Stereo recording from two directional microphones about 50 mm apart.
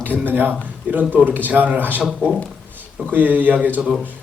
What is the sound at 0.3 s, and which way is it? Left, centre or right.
A man's voice, right.